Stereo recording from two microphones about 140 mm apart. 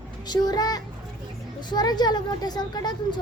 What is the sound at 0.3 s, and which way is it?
Speech, 30° left (ahead or behind).